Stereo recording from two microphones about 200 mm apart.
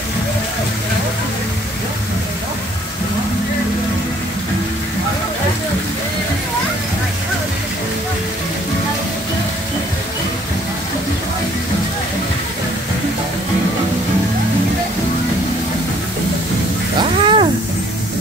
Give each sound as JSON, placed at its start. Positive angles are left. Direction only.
{"t": 17.2, "sound": "cat", "side_deg": -25}